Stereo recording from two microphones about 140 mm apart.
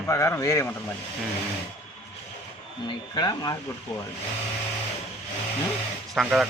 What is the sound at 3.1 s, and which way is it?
Speech, 30° left (ahead or behind).